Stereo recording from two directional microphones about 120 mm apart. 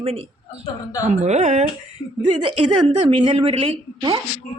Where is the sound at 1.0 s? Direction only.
70° right (ahead or behind).